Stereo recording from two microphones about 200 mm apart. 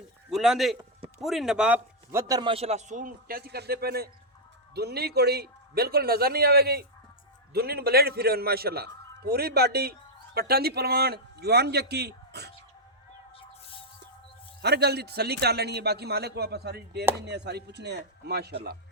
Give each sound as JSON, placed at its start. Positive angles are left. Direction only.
{"t": 0.3, "sound": "a man's voice", "side_deg": 0}
{"t": 14.6, "sound": "a man's voice", "side_deg": -55}